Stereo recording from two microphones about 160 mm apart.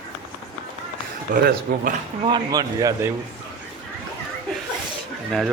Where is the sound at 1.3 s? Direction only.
65° right (ahead or behind).